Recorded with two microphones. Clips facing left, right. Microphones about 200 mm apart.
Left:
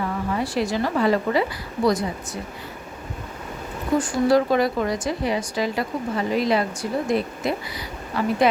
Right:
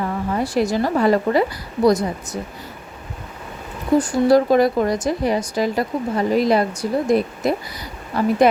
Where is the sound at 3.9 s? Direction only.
35° right (ahead or behind).